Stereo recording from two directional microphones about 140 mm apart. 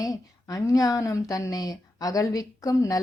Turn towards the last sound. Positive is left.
turn(degrees=25)  # may be behind; listen again after turning